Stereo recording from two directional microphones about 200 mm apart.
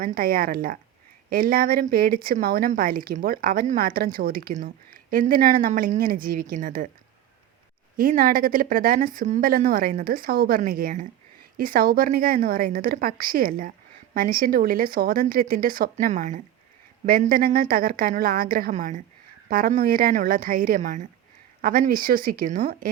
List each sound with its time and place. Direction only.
0.0 s speech: 45° right (ahead or behind)
7.9 s speech: 45° right (ahead or behind)